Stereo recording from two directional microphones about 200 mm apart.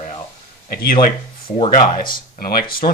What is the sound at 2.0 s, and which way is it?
Speech, 50° left (ahead or behind).